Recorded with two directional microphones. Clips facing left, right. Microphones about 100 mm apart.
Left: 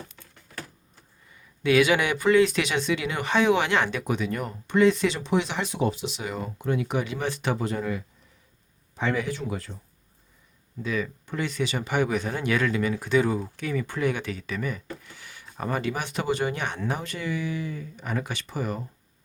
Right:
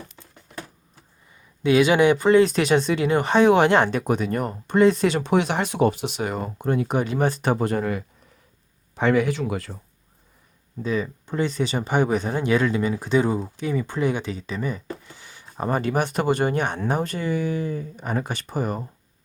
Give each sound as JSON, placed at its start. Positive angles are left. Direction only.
{"t": 0.2, "sound": "a sound", "side_deg": -15}
{"t": 1.6, "sound": "speech", "side_deg": -25}
{"t": 10.8, "sound": "speech", "side_deg": -30}